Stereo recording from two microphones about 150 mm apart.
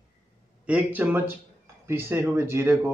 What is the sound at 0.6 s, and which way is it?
Speech, 10° right (ahead or behind).